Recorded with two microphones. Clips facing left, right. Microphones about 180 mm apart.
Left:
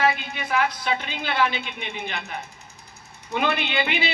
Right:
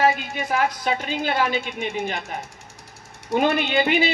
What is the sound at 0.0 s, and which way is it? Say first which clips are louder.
A woman's voice: right 3 dB; 45° right (ahead or behind).